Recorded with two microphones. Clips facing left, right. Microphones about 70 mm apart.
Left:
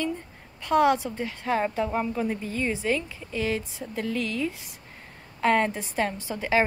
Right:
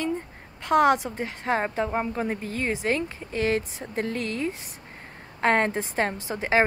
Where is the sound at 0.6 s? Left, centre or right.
Right.